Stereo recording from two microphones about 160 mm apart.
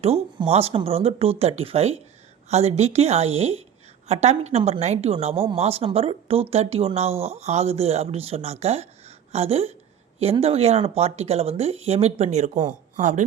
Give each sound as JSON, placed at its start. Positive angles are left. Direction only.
{"t": 0.0, "sound": "speech", "side_deg": -40}